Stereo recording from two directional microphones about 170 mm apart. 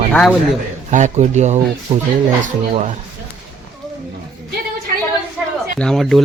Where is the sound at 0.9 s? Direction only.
45° right (ahead or behind).